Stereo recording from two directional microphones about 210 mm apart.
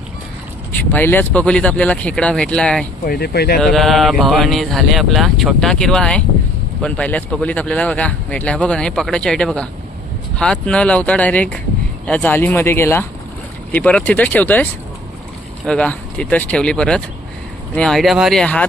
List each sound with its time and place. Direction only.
0.8 s speech: 10° left (ahead or behind)
3.1 s speech: 50° left (ahead or behind)
3.6 s speech: centre (ahead or behind)